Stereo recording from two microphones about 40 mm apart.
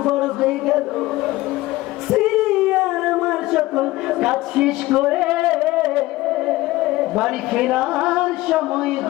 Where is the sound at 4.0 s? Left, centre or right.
Centre.